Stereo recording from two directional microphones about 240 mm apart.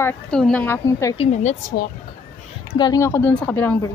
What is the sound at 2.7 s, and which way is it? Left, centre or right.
A woman's voice, centre.